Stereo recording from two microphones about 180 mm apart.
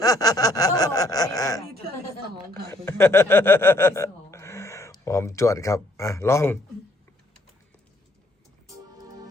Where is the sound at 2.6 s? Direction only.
15° left (ahead or behind).